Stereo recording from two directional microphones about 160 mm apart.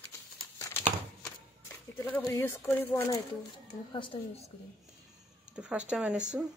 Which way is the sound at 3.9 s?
30° left (ahead or behind).